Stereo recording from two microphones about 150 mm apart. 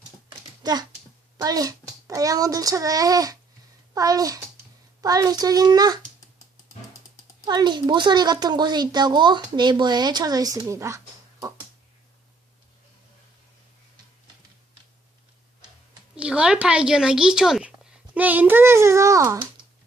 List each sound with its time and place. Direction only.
0.6 s a child's voice: 25° right (ahead or behind)
7.4 s a woman's voice: 30° right (ahead or behind)
16.1 s a woman's voice: 5° right (ahead or behind)